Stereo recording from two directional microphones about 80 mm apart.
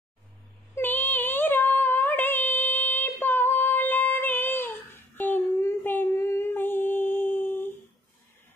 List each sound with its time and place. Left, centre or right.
0.7 s female singing: left